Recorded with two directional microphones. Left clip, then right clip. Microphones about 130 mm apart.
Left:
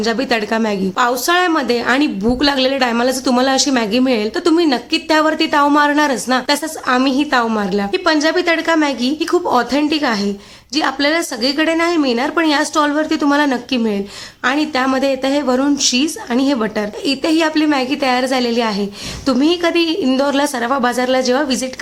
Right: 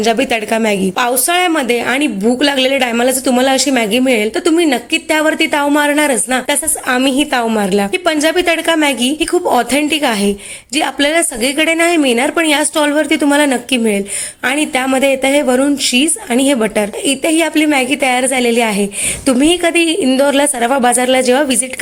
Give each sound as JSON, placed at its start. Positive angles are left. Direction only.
{"t": 0.0, "sound": "a woman's voice", "side_deg": -10}